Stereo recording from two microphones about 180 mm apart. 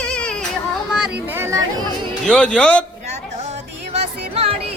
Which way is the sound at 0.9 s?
10° right (ahead or behind).